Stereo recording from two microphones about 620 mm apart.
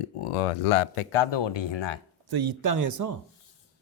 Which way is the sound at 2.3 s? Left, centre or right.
Right.